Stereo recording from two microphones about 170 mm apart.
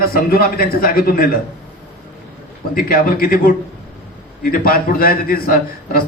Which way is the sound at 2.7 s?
60° left (ahead or behind).